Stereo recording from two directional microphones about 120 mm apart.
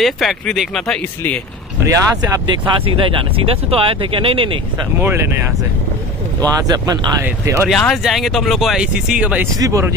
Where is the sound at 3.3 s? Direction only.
50° right (ahead or behind).